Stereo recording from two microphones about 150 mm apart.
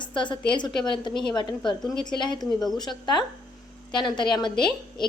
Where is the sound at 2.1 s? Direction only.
30° left (ahead or behind).